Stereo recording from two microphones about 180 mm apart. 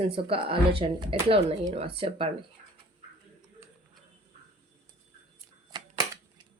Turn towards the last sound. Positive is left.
turn(degrees=-25)  # may be behind; listen again after turning